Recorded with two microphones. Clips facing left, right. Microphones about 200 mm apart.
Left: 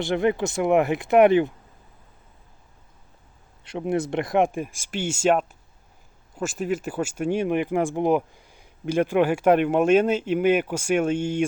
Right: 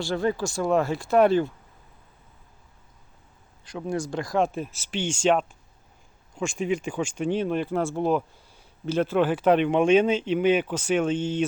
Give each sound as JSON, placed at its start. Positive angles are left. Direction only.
{"t": 0.0, "sound": "speech", "side_deg": 20}
{"t": 3.6, "sound": "speech", "side_deg": 25}